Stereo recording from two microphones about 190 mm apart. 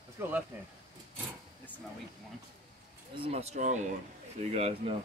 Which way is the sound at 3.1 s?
30° right (ahead or behind).